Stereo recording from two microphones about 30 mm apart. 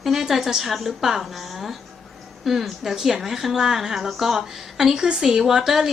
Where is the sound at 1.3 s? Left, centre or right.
Centre.